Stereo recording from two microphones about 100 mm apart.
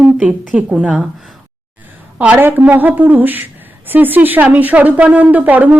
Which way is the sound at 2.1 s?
15° right (ahead or behind).